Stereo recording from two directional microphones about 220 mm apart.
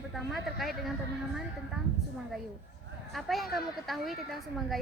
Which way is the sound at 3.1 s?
Centre (ahead or behind).